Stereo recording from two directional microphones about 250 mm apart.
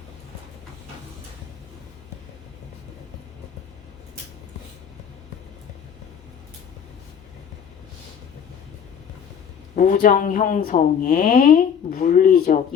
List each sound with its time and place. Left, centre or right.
9.7 s speech: left